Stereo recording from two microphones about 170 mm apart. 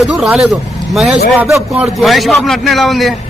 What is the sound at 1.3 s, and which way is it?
Speech, 15° right (ahead or behind).